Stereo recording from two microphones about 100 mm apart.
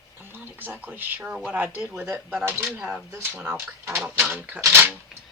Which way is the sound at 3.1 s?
20° right (ahead or behind).